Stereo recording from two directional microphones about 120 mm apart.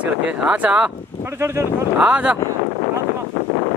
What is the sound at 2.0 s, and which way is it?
Speech, 10° right (ahead or behind).